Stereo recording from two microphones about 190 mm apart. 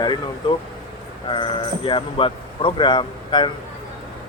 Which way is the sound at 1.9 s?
25° left (ahead or behind).